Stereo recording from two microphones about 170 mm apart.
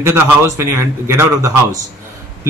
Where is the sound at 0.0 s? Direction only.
15° right (ahead or behind).